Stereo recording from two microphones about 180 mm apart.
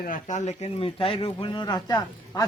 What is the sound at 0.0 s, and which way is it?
Speech, 45° left (ahead or behind).